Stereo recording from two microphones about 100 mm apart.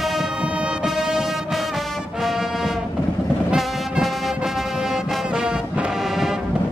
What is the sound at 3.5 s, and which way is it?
Brass instrument, centre (ahead or behind).